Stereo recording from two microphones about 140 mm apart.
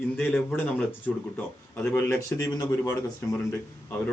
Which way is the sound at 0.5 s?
10° left (ahead or behind).